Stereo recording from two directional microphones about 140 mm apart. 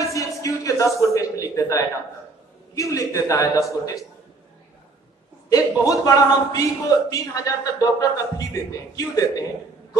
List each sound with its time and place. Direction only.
0.1 s a sound: 25° left (ahead or behind)
2.7 s a man's voice: 25° left (ahead or behind)
5.5 s a man's voice: 25° left (ahead or behind)